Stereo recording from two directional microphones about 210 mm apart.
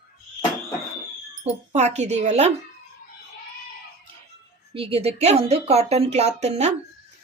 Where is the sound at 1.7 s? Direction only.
30° right (ahead or behind).